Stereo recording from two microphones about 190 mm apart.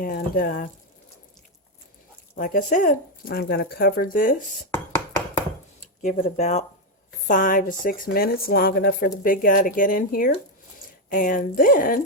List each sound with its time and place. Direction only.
0.0 s speech: 50° left (ahead or behind)
2.3 s speech: 45° left (ahead or behind)
6.0 s speech: 40° left (ahead or behind)